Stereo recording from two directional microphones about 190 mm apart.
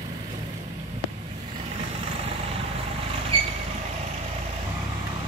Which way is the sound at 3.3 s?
30° right (ahead or behind).